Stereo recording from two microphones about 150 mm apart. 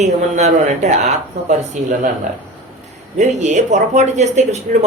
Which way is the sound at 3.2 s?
55° right (ahead or behind).